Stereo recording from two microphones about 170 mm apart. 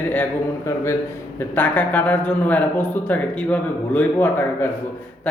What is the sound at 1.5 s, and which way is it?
Speech, 10° left (ahead or behind).